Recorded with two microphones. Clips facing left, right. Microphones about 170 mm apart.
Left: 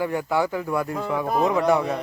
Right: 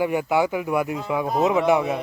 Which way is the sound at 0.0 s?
15° right (ahead or behind).